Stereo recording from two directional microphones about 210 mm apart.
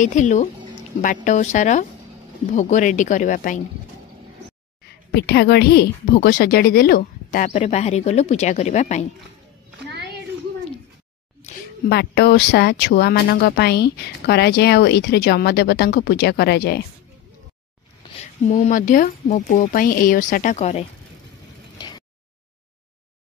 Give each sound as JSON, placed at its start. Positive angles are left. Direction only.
{"t": 0.0, "sound": "a woman's voice", "side_deg": 35}
{"t": 4.8, "sound": "a woman's voice", "side_deg": 50}
{"t": 11.9, "sound": "speech", "side_deg": 50}
{"t": 18.5, "sound": "a woman's voice", "side_deg": 40}
{"t": 21.7, "sound": "a sound", "side_deg": 20}